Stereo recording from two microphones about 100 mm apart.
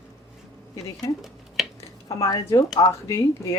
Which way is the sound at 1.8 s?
35° left (ahead or behind).